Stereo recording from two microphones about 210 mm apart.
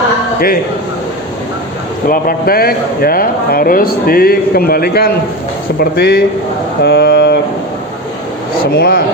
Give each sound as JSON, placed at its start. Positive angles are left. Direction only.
{"t": 2.0, "sound": "speech", "side_deg": 45}
{"t": 6.8, "sound": "a sound", "side_deg": 50}
{"t": 8.7, "sound": "speech", "side_deg": 45}